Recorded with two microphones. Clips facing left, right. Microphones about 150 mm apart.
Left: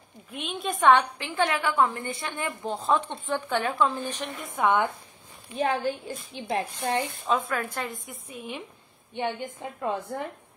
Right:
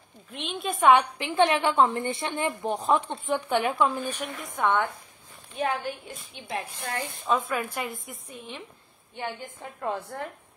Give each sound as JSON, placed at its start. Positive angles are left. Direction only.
{"t": 0.3, "sound": "a woman's voice", "side_deg": 0}
{"t": 0.9, "sound": "a woman's voice", "side_deg": -20}
{"t": 4.6, "sound": "speech", "side_deg": 15}
{"t": 5.6, "sound": "a woman's voice", "side_deg": 30}
{"t": 7.2, "sound": "a woman's voice", "side_deg": 0}